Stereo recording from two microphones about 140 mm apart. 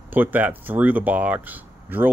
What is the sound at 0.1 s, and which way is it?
Speech, 15° right (ahead or behind).